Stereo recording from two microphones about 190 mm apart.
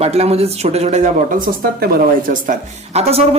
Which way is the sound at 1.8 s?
55° right (ahead or behind).